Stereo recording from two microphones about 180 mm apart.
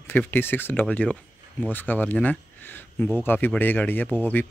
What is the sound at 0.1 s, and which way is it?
Speech, 10° left (ahead or behind).